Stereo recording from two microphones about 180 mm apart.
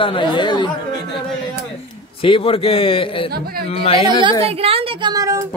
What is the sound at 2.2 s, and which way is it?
A man's voice, 30° left (ahead or behind).